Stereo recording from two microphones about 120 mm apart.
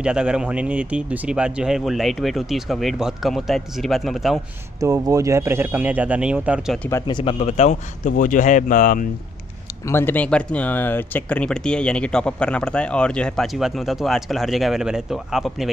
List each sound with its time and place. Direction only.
0.0 s speech: 5° right (ahead or behind)
4.7 s speech: 30° right (ahead or behind); by 6.6 s 10° right (ahead or behind)
7.1 s speech: 40° left (ahead or behind)
7.3 s speech: 65° left (ahead or behind); by 8.8 s 90° left
9.8 s speech: 20° left (ahead or behind); by 15.7 s centre (ahead or behind)